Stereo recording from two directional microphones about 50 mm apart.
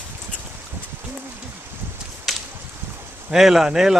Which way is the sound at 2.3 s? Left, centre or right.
Centre.